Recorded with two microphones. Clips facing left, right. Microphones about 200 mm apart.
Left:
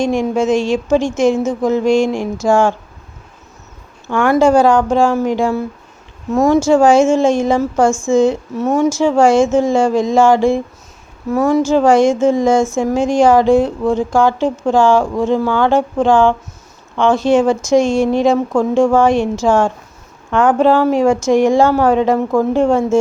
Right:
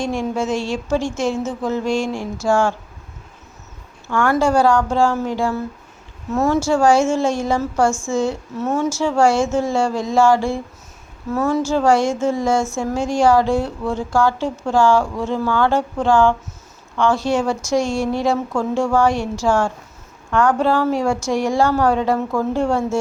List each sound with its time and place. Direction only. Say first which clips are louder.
0.0 s a woman's voice: left 6 dB; 15° left (ahead or behind)
4.1 s a woman's voice: left 5 dB; 20° left (ahead or behind)